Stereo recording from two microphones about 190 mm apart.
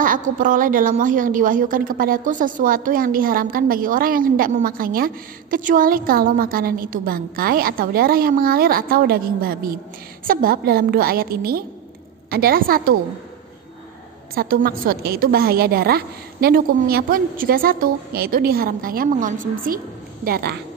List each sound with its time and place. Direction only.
0.0 s a woman's voice: 45° right (ahead or behind)
14.3 s a woman's voice: 50° right (ahead or behind)